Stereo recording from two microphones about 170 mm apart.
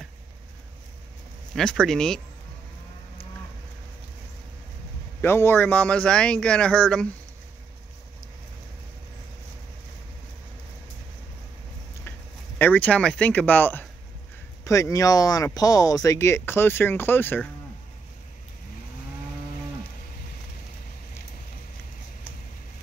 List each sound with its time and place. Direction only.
1.5 s speech: 5° left (ahead or behind)
5.2 s speech: 15° left (ahead or behind)
12.5 s speech: 10° left (ahead or behind)